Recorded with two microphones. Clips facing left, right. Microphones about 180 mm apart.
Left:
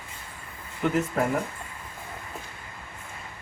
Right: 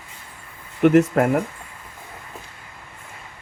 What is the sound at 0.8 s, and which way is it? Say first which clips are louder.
Speech: right 10 dB; 75° right (ahead or behind).